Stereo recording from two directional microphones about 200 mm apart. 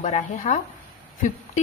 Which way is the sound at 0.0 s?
35° left (ahead or behind).